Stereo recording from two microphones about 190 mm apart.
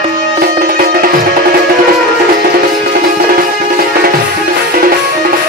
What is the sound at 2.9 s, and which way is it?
Music, 50° right (ahead or behind).